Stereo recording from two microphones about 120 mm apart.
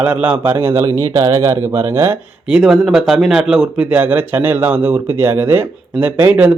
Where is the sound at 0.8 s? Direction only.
25° left (ahead or behind).